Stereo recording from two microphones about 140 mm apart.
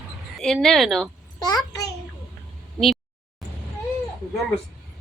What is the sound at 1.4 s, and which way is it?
Speech, 25° left (ahead or behind).